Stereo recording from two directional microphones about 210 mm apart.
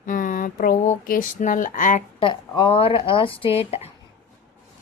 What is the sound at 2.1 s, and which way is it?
Speech, 25° left (ahead or behind).